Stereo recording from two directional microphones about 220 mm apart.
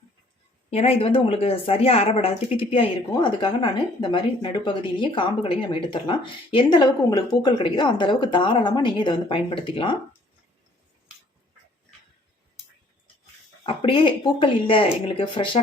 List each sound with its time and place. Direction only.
0.7 s speech: 30° left (ahead or behind)
13.7 s speech: 25° left (ahead or behind)